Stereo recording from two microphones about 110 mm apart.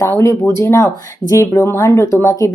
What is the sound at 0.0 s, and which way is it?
Speech, 25° left (ahead or behind).